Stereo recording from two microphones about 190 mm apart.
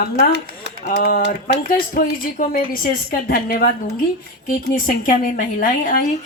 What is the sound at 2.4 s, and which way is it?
Speech, 45° left (ahead or behind).